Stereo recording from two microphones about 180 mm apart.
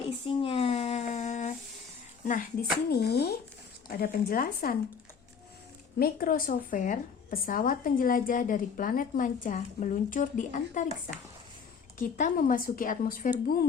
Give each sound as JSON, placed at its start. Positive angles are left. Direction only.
{"t": 0.3, "sound": "a sound", "side_deg": 30}
{"t": 2.2, "sound": "a woman's voice", "side_deg": 50}
{"t": 2.9, "sound": "speech", "side_deg": 65}
{"t": 6.0, "sound": "a woman's voice", "side_deg": 55}
{"t": 11.9, "sound": "a woman's voice", "side_deg": 50}